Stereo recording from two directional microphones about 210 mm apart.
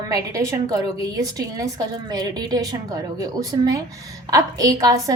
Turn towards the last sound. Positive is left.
turn(degrees=-15)  # may be behind; listen again after turning